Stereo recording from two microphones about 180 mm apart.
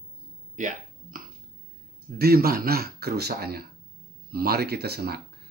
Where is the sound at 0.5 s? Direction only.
45° right (ahead or behind).